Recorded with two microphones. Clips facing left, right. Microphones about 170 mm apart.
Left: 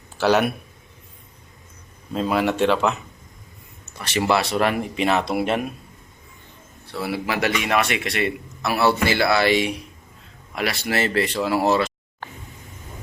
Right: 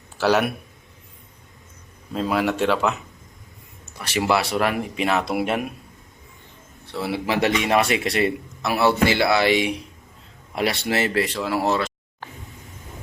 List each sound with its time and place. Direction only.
0.2 s speech: centre (ahead or behind)
2.1 s speech: centre (ahead or behind)
3.9 s speech: 10° right (ahead or behind)
6.9 s speech: 25° right (ahead or behind)
8.6 s speech: 20° right (ahead or behind)
10.5 s speech: 30° right (ahead or behind)
11.1 s speech: centre (ahead or behind)